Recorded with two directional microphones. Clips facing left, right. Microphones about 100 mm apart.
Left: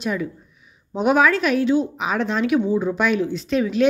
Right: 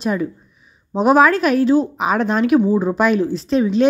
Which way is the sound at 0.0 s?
40° right (ahead or behind).